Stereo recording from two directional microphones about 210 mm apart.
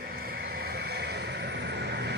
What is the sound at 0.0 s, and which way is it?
Vehicle, 45° right (ahead or behind).